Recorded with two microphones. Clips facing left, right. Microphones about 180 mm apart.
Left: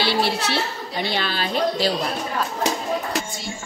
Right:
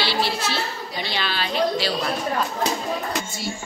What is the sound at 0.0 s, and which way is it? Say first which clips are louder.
A woman's voice: left 2 dB; 55° left (ahead or behind).